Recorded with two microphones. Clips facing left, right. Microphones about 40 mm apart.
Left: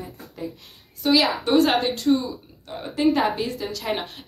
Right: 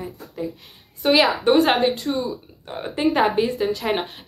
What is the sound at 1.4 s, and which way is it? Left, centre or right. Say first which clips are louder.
Speech: right 3 dB; centre.